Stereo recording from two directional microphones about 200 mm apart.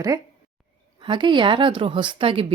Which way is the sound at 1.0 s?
25° right (ahead or behind).